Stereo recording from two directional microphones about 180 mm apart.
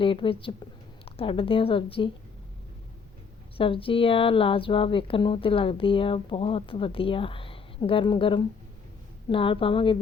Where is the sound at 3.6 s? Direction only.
30° left (ahead or behind).